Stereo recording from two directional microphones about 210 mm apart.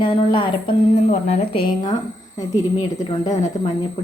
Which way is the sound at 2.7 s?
20° left (ahead or behind).